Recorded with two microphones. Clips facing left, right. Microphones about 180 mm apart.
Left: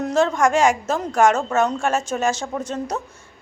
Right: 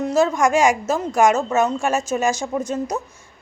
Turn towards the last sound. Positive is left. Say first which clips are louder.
# right 3 dB
turn(degrees=-10)  # may be behind; listen again after turning